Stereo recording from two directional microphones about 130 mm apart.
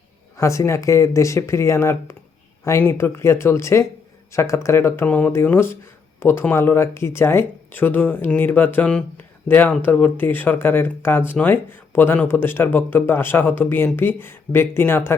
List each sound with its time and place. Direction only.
0.3 s speech: 25° left (ahead or behind)